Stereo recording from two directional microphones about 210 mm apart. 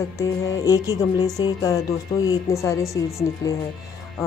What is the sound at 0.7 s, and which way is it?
Speech, 15° left (ahead or behind).